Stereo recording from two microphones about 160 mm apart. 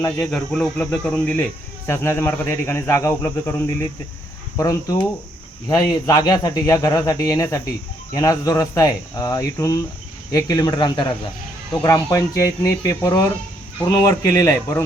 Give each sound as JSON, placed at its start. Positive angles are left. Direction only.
{"t": 0.2, "sound": "speech", "side_deg": 5}